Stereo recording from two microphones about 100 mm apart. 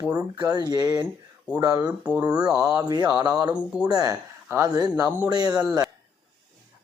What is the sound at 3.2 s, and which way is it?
Speech, 40° right (ahead or behind).